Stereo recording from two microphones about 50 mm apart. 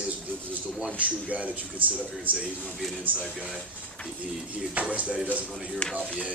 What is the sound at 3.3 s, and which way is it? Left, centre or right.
Speech, centre.